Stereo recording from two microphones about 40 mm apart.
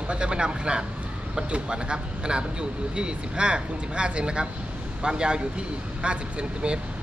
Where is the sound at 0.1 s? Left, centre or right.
Right.